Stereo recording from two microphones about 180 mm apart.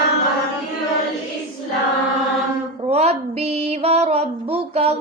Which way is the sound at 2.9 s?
35° right (ahead or behind).